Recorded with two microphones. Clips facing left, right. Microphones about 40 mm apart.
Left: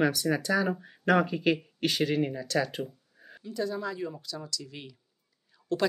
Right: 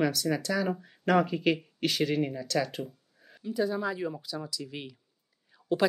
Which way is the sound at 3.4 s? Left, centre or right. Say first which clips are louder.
Right 3 dB; centre.